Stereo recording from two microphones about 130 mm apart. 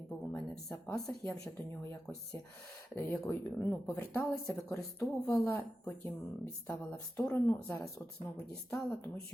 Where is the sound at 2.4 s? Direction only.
20° left (ahead or behind).